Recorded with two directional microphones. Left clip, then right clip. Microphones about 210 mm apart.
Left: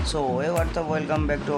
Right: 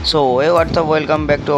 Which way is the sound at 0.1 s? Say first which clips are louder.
Right 12 dB; 25° right (ahead or behind).